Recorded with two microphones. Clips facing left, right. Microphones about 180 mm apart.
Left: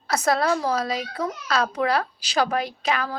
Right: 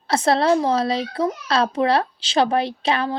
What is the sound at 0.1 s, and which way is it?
A woman's voice, 25° right (ahead or behind).